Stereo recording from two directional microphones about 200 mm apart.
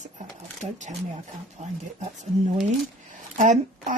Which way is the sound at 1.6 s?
35° right (ahead or behind).